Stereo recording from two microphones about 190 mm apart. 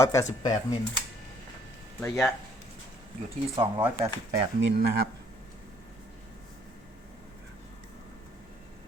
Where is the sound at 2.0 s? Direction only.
Centre (ahead or behind).